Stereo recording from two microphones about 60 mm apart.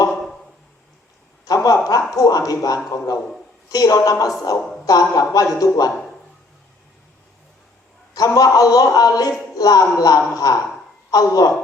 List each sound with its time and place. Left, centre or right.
1.5 s speech: left
2.5 s a man's voice: left
8.1 s a man's voice: left